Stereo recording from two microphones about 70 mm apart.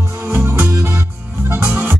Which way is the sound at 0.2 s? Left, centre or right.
Right.